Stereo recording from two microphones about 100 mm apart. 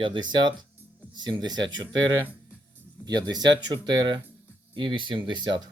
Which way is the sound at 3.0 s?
45° right (ahead or behind).